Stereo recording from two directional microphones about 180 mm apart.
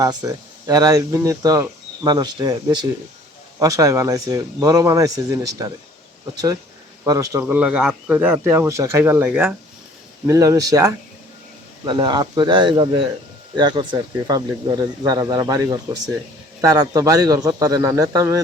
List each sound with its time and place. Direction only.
0.0 s speech: 20° right (ahead or behind)